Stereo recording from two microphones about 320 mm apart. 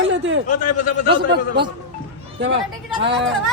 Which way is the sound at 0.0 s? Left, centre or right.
Right.